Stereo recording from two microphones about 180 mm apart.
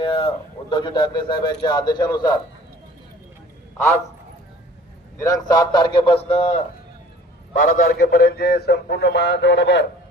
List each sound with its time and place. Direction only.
0.0 s a man's voice: 30° left (ahead or behind)
3.8 s a man's voice: 15° left (ahead or behind)
5.1 s a man's voice: 20° left (ahead or behind); by 6.7 s 35° left (ahead or behind)
7.5 s a man's voice: 50° left (ahead or behind); by 9.8 s 75° left (ahead or behind)